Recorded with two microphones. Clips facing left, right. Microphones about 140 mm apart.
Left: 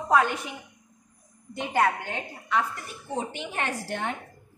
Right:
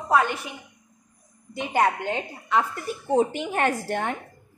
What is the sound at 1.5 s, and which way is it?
Speech, 15° right (ahead or behind).